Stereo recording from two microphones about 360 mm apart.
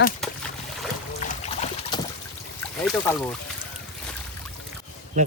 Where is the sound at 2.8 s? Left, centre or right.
Centre.